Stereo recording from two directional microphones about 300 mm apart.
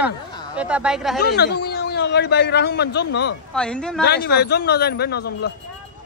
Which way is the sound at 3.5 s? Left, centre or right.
Centre.